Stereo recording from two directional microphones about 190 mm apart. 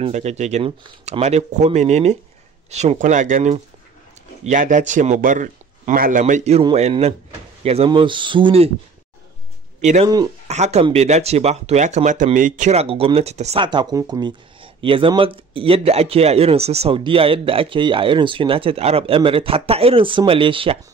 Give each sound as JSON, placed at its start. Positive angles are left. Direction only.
{"t": 0.0, "sound": "a man's voice", "side_deg": -35}
{"t": 9.8, "sound": "speech", "side_deg": -35}
{"t": 10.0, "sound": "speech", "side_deg": -20}
{"t": 10.5, "sound": "speech", "side_deg": -35}